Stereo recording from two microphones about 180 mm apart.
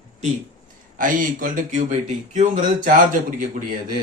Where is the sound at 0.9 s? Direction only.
45° right (ahead or behind).